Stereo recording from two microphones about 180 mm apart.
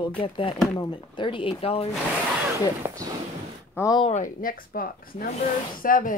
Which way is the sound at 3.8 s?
20° left (ahead or behind).